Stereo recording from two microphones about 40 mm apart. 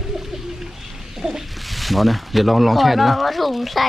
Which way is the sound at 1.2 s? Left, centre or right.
Centre.